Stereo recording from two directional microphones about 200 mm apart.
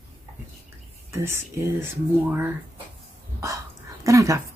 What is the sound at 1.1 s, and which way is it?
Speech, 15° right (ahead or behind).